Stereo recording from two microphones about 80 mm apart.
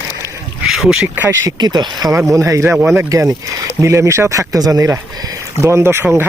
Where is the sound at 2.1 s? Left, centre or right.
Right.